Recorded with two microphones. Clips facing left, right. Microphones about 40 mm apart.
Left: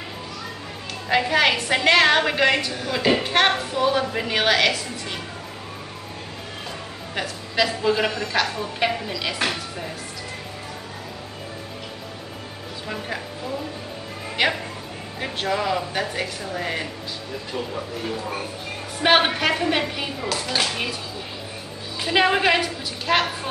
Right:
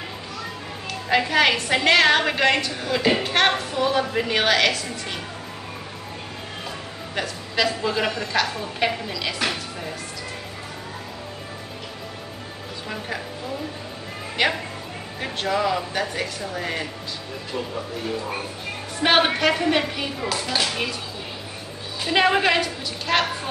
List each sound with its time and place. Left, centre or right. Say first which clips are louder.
1.0 s a woman's voice: even; centre
7.2 s a woman's voice: left 1 dB; centre
14.3 s a woman's voice: even; centre
22.0 s a woman's voice: even; centre